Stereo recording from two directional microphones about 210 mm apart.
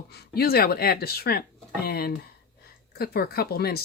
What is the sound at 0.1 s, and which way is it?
Speech, 45° left (ahead or behind).